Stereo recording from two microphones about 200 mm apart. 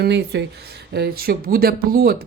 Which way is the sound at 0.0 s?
55° right (ahead or behind).